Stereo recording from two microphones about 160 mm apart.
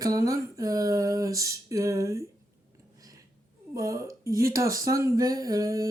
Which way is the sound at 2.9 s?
20° right (ahead or behind).